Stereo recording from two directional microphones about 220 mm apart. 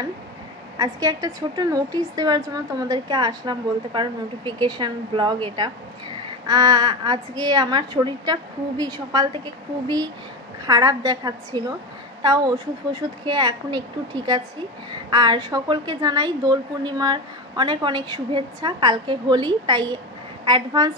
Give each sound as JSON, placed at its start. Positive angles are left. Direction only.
{"t": 0.7, "sound": "a woman's voice", "side_deg": -15}
{"t": 10.6, "sound": "a woman's voice", "side_deg": -15}